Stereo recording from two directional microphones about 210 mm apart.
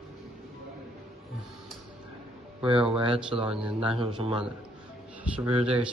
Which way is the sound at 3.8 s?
25° right (ahead or behind).